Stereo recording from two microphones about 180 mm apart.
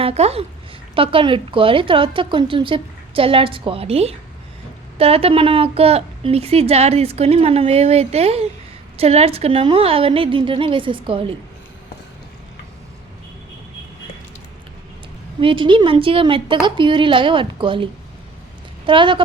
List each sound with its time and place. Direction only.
0.0 s a woman's voice: 35° right (ahead or behind)
15.4 s a woman's voice: 30° right (ahead or behind)
18.9 s a woman's voice: 25° right (ahead or behind)